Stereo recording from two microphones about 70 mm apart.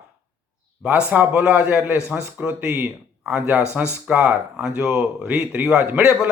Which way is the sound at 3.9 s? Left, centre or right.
Centre.